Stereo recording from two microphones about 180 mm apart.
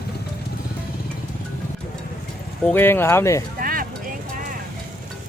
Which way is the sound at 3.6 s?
50° right (ahead or behind).